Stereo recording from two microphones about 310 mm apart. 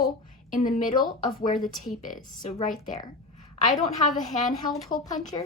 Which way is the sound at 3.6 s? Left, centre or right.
Left.